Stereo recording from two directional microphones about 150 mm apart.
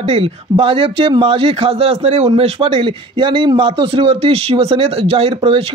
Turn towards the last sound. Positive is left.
turn(degrees=-40)  # may be behind; listen again after turning